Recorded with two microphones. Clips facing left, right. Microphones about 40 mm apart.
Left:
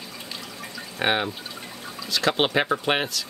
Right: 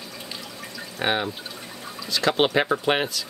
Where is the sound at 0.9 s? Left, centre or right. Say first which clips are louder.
Left 1 dB; centre.